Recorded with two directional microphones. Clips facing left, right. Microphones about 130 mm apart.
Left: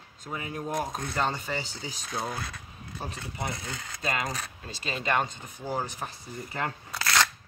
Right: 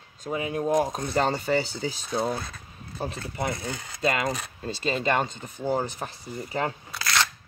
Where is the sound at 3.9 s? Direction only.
25° right (ahead or behind).